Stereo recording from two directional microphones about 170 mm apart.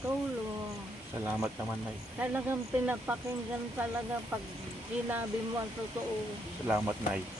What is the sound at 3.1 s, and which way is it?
Speech, 10° right (ahead or behind).